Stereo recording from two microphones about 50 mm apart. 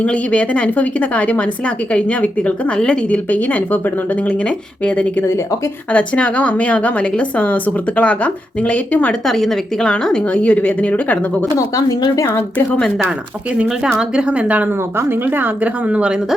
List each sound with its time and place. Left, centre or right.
0.0 s a woman's voice: left
3.2 s speech: left
4.3 s a woman's voice: left
9.2 s a woman's voice: centre
10.0 s a woman's voice: centre
14.2 s speech: right
14.9 s a woman's voice: right
15.9 s speech: right